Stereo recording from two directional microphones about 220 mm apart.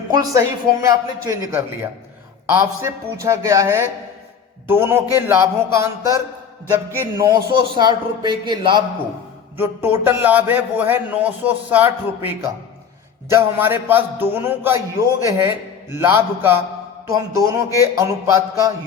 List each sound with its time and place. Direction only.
0.1 s a man's voice: 15° right (ahead or behind)
3.2 s a man's voice: 15° right (ahead or behind)
9.6 s a man's voice: 10° right (ahead or behind)